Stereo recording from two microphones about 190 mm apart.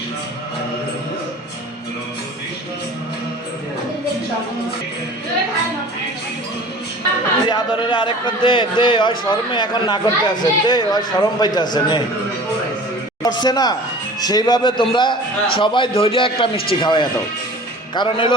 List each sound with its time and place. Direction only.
7.4 s a man's voice: 25° left (ahead or behind)
13.2 s a man's voice: 20° left (ahead or behind)